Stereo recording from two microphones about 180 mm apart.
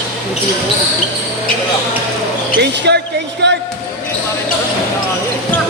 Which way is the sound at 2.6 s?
70° right (ahead or behind).